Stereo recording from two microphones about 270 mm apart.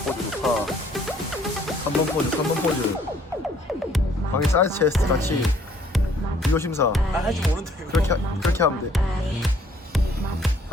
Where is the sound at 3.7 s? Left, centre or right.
Centre.